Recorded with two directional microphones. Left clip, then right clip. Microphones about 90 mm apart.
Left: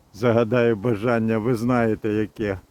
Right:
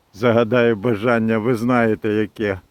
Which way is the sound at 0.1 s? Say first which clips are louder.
Right 4 dB; 5° right (ahead or behind).